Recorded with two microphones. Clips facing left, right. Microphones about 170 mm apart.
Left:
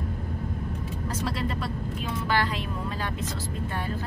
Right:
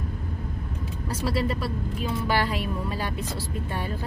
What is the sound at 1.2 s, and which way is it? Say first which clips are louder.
Speech: right 5 dB; 5° right (ahead or behind).